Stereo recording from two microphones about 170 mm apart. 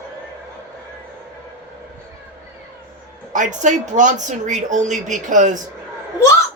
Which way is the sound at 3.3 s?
45° right (ahead or behind).